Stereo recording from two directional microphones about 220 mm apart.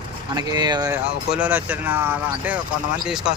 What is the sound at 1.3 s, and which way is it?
Speech, 5° right (ahead or behind).